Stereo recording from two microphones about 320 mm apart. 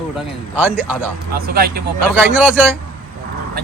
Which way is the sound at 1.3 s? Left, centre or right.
Right.